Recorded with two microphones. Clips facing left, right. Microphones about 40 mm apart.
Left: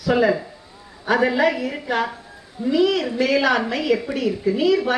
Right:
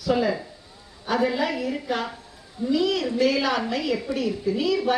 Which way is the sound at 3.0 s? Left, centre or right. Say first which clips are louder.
Left 3 dB; left.